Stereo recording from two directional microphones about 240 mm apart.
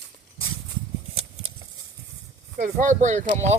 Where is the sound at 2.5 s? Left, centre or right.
Right.